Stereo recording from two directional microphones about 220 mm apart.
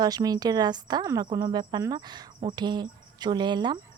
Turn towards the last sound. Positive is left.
turn(degrees=-20)  # may be behind; listen again after turning